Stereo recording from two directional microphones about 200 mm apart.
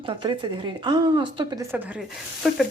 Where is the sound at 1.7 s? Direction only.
5° right (ahead or behind).